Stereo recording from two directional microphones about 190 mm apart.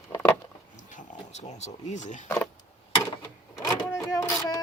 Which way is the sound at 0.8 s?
40° left (ahead or behind).